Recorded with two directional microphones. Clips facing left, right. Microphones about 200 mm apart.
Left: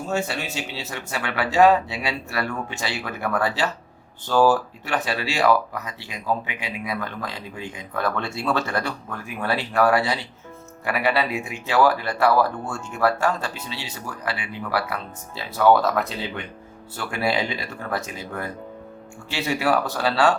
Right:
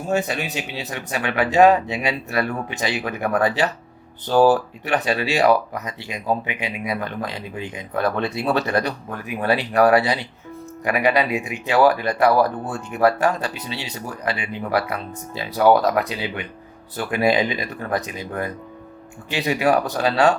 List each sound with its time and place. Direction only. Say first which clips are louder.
0.0 s speech: right 3 dB; 15° right (ahead or behind)